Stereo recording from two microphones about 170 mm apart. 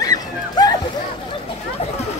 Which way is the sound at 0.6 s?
25° left (ahead or behind).